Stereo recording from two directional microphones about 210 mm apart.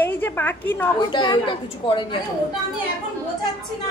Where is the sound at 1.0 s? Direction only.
20° left (ahead or behind).